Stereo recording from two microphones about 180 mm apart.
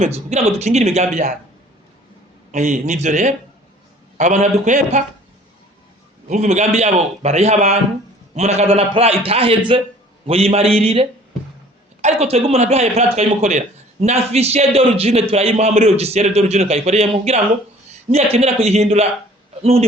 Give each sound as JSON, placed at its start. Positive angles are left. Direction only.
{"t": 0.3, "sound": "a man's voice", "side_deg": -40}
{"t": 2.5, "sound": "a man's voice", "side_deg": -40}
{"t": 6.2, "sound": "a man's voice", "side_deg": -40}
{"t": 12.0, "sound": "a man's voice", "side_deg": -35}